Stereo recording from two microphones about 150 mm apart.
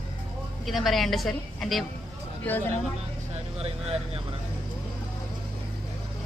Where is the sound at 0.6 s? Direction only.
Centre (ahead or behind).